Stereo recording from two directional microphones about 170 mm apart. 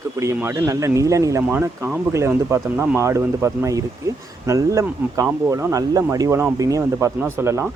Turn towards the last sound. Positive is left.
turn(degrees=-15)  # may be behind; listen again after turning